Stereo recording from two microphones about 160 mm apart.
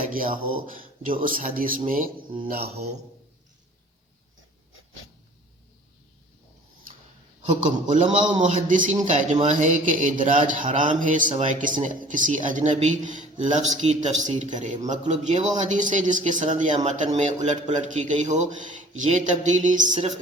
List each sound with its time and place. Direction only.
0.1 s a man's voice: 60° right (ahead or behind)
2.6 s speech: 40° right (ahead or behind)
7.6 s speech: 50° right (ahead or behind)
19.9 s speech: 40° right (ahead or behind)